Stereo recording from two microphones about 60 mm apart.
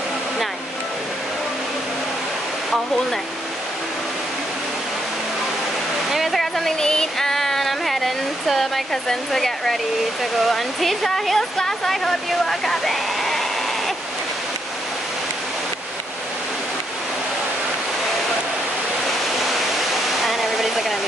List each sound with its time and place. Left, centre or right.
6.1 s a sound: centre
10.5 s speech: centre
20.2 s hair dryer: centre